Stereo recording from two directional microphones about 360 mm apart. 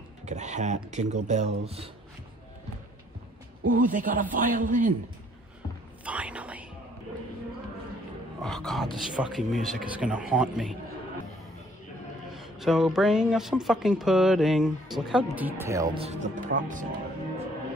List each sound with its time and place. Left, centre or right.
0.3 s speech: centre
3.6 s speech: right
6.0 s whispering: centre
8.4 s speech: centre
12.4 s speech: centre; by 16.8 s right